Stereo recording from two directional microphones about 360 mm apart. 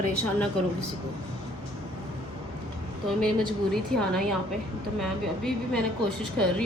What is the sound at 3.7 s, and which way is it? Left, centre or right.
Speech, centre.